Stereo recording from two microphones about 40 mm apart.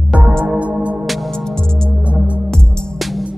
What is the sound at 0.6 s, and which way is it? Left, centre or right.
Music, right.